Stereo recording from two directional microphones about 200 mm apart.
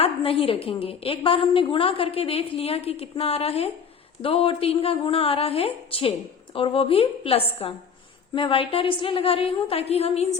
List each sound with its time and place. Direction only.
0.0 s a woman's voice: 30° left (ahead or behind)